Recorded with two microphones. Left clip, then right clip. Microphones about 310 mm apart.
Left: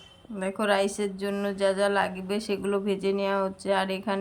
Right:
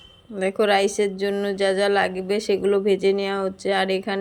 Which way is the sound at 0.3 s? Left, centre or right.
Centre.